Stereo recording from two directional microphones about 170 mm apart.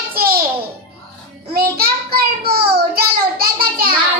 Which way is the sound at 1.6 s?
65° right (ahead or behind).